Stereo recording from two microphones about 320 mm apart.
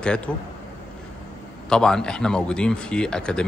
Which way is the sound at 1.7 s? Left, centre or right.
Centre.